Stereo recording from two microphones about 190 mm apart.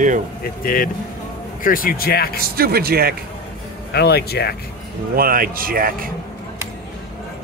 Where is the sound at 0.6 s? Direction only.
50° left (ahead or behind).